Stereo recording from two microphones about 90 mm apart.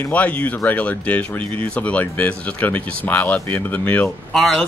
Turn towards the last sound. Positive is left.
turn(degrees=0)  # may be behind; listen again after turning